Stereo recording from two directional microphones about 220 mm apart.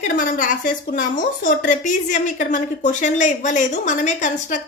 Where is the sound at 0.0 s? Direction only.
40° left (ahead or behind).